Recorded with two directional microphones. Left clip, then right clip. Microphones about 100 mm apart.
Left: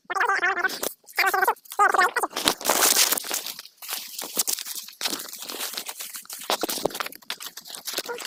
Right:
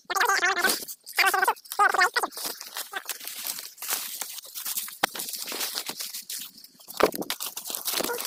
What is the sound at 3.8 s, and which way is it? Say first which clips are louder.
Walk: right 1 dB; 30° right (ahead or behind).